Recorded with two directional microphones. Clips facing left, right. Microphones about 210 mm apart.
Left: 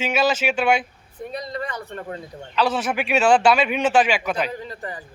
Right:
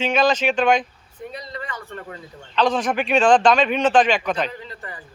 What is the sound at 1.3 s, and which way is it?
Speech, 40° left (ahead or behind).